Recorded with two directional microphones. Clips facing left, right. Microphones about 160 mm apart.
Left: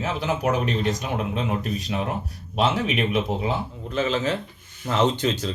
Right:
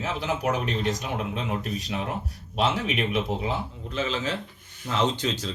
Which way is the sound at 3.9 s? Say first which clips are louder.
Left 5 dB; 50° left (ahead or behind).